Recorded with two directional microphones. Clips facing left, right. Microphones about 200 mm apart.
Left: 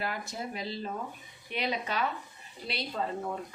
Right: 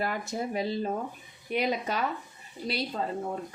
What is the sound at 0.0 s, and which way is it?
A woman's voice, 50° right (ahead or behind).